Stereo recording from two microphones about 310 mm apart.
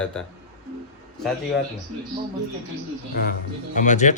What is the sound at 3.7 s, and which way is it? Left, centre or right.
Speech, left.